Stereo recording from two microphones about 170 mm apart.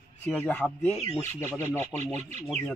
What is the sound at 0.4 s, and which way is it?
Speech, 10° left (ahead or behind).